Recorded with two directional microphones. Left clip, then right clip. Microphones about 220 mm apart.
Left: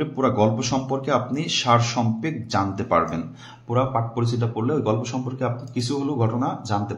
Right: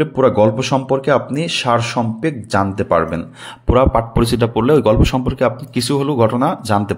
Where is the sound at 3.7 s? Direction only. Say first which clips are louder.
Right 9 dB; 50° right (ahead or behind).